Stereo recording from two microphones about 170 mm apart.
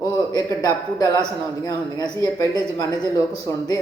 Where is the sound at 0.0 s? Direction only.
20° left (ahead or behind).